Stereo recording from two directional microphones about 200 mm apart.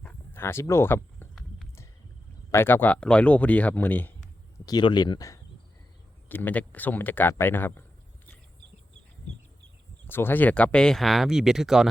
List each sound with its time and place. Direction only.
0.0 s a sound: 10° left (ahead or behind)
2.5 s speech: 10° left (ahead or behind)
4.6 s speech: 20° left (ahead or behind)
10.1 s speech: 10° left (ahead or behind)